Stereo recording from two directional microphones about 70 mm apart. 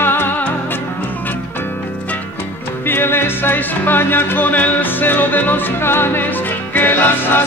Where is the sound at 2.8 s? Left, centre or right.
Left.